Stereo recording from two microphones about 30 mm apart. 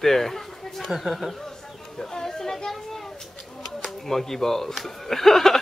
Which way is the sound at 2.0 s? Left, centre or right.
Left.